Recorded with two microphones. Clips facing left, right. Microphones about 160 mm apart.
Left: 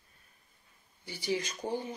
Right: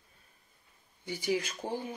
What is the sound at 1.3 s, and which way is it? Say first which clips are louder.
Speech: even; centre (ahead or behind).